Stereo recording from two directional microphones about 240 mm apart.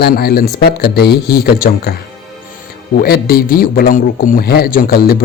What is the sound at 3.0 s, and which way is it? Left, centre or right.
A man's voice, left.